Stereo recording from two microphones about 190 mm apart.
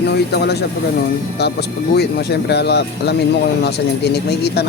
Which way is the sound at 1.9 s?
60° left (ahead or behind).